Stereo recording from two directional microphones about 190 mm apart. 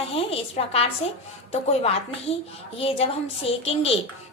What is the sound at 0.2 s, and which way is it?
A woman's voice, 30° left (ahead or behind).